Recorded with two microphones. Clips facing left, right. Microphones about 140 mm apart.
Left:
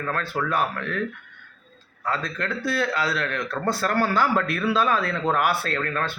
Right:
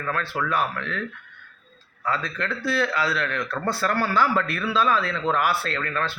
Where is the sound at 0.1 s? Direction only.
45° left (ahead or behind).